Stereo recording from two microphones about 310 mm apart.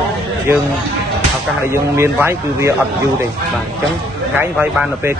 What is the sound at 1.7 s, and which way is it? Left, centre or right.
Speech, centre.